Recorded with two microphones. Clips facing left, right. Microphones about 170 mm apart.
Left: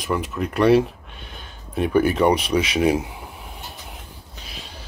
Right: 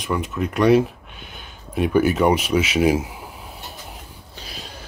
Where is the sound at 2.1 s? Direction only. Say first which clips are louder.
Even; 5° right (ahead or behind).